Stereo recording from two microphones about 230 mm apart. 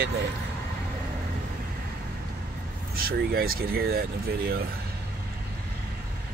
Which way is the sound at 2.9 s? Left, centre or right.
Right.